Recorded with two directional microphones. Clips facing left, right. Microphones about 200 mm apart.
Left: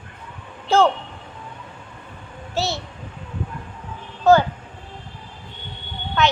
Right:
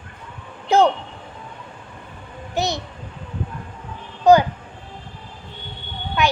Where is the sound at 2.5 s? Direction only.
15° right (ahead or behind).